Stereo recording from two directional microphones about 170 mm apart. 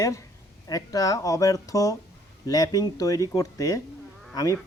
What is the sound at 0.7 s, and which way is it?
Speech, 20° left (ahead or behind).